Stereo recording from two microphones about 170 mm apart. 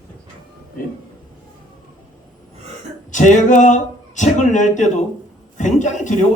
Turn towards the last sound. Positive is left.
turn(degrees=45)  # may be behind; listen again after turning